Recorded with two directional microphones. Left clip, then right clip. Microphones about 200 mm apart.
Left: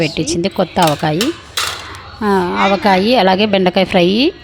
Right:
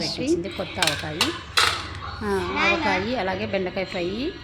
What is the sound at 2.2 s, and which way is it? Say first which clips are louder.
Speech: left 12 dB; 40° left (ahead or behind).